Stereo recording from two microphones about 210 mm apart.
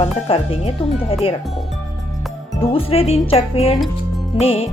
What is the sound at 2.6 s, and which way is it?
A woman's voice, 25° left (ahead or behind).